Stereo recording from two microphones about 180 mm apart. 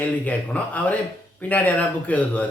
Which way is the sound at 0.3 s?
10° left (ahead or behind).